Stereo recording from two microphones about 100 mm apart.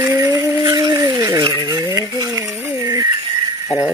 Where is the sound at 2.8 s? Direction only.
40° right (ahead or behind).